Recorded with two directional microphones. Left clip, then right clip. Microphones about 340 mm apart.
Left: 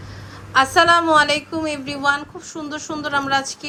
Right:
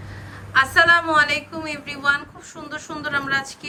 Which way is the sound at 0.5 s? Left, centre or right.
Centre.